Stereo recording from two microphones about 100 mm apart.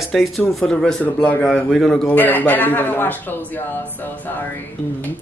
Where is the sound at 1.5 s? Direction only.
5° left (ahead or behind).